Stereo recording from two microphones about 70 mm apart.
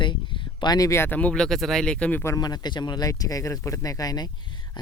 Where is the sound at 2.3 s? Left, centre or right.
Left.